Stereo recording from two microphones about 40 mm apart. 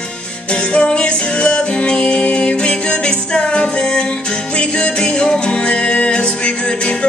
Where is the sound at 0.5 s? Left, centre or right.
Left.